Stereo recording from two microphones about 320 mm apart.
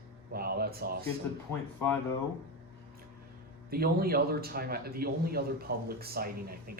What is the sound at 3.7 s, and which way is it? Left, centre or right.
A man's voice, right.